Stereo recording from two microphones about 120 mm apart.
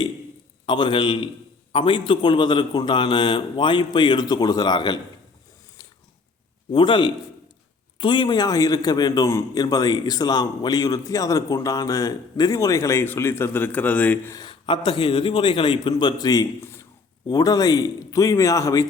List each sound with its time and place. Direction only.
0.6 s a man's voice: 40° left (ahead or behind)
6.7 s a man's voice: 45° left (ahead or behind); by 14.3 s 15° left (ahead or behind)
14.3 s a man's voice: 40° left (ahead or behind); by 16.8 s 25° left (ahead or behind)
17.2 s a man's voice: 35° left (ahead or behind)